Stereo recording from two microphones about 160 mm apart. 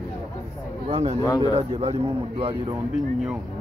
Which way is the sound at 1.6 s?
40° right (ahead or behind).